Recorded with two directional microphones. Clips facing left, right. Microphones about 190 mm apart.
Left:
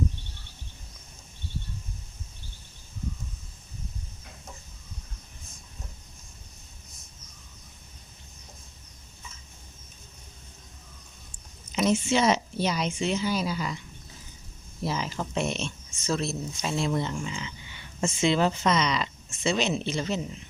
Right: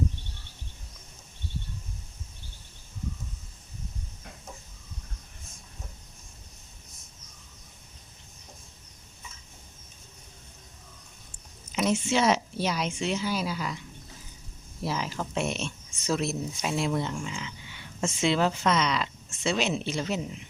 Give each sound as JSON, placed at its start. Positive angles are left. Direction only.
{"t": 11.7, "sound": "speech", "side_deg": -5}
{"t": 14.8, "sound": "speech", "side_deg": -5}